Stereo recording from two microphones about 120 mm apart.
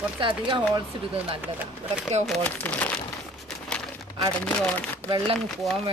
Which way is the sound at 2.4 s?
15° left (ahead or behind).